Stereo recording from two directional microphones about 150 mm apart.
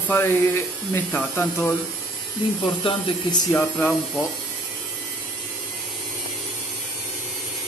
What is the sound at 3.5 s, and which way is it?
Speech, 15° left (ahead or behind).